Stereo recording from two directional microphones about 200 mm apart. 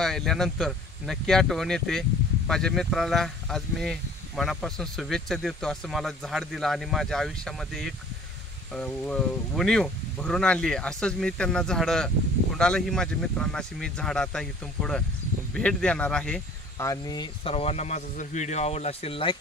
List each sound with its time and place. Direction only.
0.0 s speech: centre (ahead or behind); by 19.3 s 25° left (ahead or behind)